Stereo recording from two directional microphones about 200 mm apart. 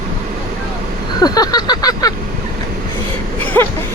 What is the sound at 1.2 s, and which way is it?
Vehicle, 20° left (ahead or behind).